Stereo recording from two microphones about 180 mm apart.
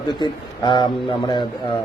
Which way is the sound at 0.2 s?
25° left (ahead or behind).